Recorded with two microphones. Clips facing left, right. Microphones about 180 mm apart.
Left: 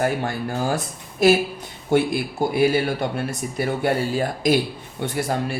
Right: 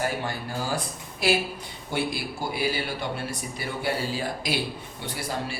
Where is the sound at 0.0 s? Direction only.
55° left (ahead or behind).